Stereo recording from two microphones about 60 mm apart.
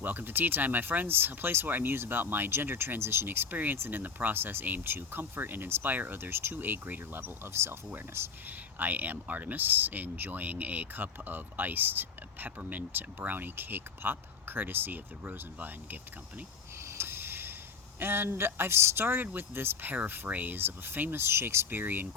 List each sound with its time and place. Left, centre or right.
0.0 s speech: right
17.0 s a sound: right
18.0 s speech: right